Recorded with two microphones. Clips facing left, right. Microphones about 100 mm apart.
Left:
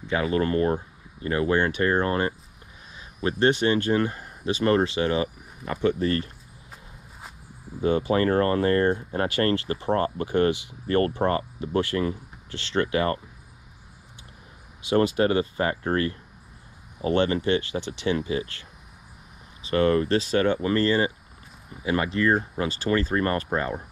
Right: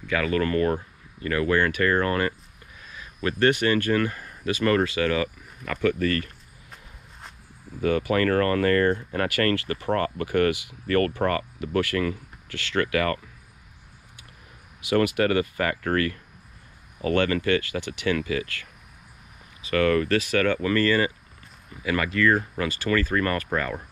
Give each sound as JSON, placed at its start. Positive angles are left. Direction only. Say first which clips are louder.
{"t": 0.0, "sound": "speech", "louder": "even", "side_deg": 20}
{"t": 3.5, "sound": "speech", "louder": "even", "side_deg": 20}
{"t": 6.7, "sound": "walk", "louder": "left 1 dB", "side_deg": 5}
{"t": 7.8, "sound": "speech", "louder": "even", "side_deg": 20}
{"t": 15.1, "sound": "speech", "louder": "even", "side_deg": 25}
{"t": 19.7, "sound": "speech", "louder": "even", "side_deg": 20}